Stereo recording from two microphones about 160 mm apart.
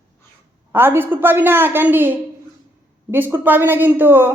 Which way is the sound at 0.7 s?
15° right (ahead or behind).